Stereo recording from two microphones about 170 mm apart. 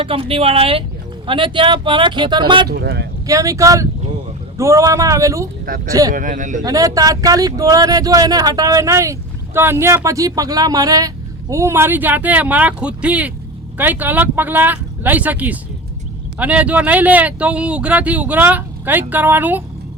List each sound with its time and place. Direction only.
0.0 s speech: 30° right (ahead or behind)
2.6 s speech: 65° right (ahead or behind)
3.2 s speech: 20° right (ahead or behind)
5.6 s speech: 55° right (ahead or behind)
5.9 s speech: 20° right (ahead or behind)
6.1 s speech: 50° right (ahead or behind)
6.6 s speech: 20° right (ahead or behind)